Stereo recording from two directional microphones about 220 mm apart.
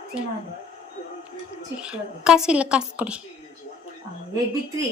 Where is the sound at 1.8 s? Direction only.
5° right (ahead or behind).